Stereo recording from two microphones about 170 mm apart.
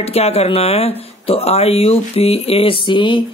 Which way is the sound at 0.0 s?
35° left (ahead or behind).